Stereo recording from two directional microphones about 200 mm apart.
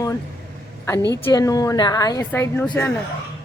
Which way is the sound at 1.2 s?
15° left (ahead or behind).